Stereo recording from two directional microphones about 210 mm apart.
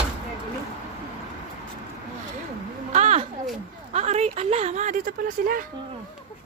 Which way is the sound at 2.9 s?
30° right (ahead or behind).